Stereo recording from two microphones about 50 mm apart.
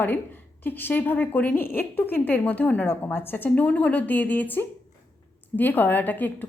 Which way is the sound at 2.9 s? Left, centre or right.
Left.